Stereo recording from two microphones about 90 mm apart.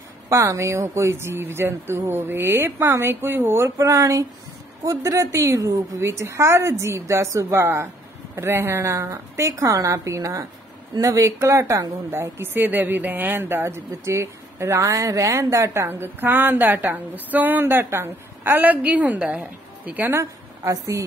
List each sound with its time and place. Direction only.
0.3 s a woman's voice: 30° right (ahead or behind)
6.0 s a woman's voice: 30° right (ahead or behind)
12.1 s speech: 25° right (ahead or behind)
20.2 s a woman's voice: 35° right (ahead or behind)